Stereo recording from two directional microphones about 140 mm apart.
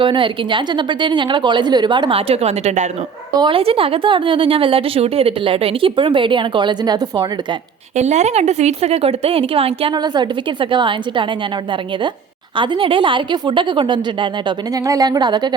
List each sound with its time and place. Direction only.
0.0 s speech: 35° right (ahead or behind)
3.3 s speech: 35° right (ahead or behind)
7.9 s speech: 55° right (ahead or behind); by 11.3 s 35° right (ahead or behind)
12.5 s speech: 40° right (ahead or behind)